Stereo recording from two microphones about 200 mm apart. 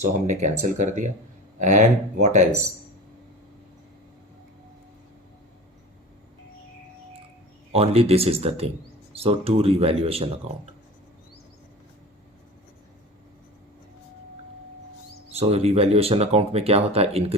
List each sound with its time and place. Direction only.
0.0 s speech: 35° right (ahead or behind)
7.7 s speech: 30° right (ahead or behind)
15.4 s speech: 30° right (ahead or behind)